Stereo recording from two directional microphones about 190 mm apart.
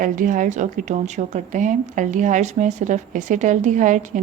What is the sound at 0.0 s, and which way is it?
Speech, 45° right (ahead or behind).